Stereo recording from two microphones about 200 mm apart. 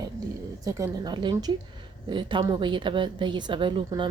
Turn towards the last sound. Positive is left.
turn(degrees=-25)  # may be behind; listen again after turning